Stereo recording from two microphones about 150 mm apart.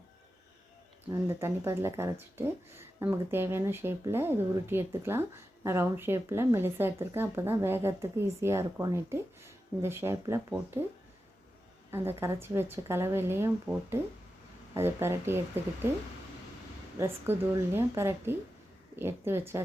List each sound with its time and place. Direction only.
1.1 s speech: 20° right (ahead or behind)
14.8 s speech: 15° right (ahead or behind)
17.0 s speech: 15° right (ahead or behind)